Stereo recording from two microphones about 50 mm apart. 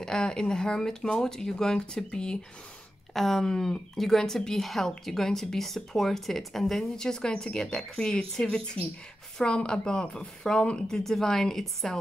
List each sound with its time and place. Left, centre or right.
0.0 s a woman's voice: centre
3.1 s a woman's voice: centre
11.1 s a woman's voice: centre